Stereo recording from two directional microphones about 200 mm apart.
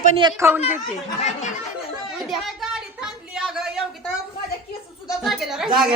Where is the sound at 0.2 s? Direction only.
20° right (ahead or behind).